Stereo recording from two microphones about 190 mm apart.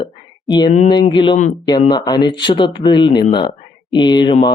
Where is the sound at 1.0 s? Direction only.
25° left (ahead or behind).